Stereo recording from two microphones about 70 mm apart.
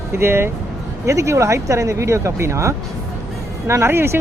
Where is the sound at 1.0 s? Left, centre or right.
Right.